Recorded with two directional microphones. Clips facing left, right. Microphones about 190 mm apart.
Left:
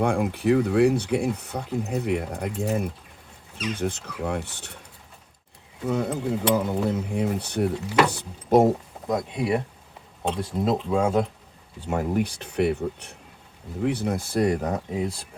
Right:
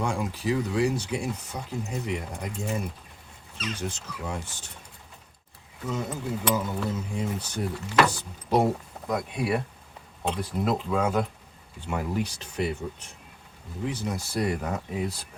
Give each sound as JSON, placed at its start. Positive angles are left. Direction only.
{"t": 0.0, "sound": "speech", "side_deg": 60}
{"t": 3.8, "sound": "speech", "side_deg": 55}
{"t": 5.8, "sound": "speech", "side_deg": 60}
{"t": 7.9, "sound": "speech", "side_deg": 10}
{"t": 8.1, "sound": "speech", "side_deg": 55}
{"t": 9.0, "sound": "speech", "side_deg": 25}
{"t": 11.8, "sound": "speech", "side_deg": 45}
{"t": 14.8, "sound": "speech", "side_deg": 30}